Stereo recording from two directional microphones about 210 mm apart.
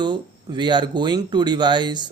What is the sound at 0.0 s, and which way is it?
Speech, 20° right (ahead or behind).